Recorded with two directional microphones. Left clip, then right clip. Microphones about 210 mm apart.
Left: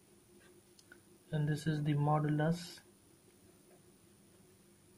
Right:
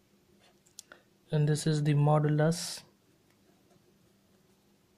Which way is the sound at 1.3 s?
45° right (ahead or behind).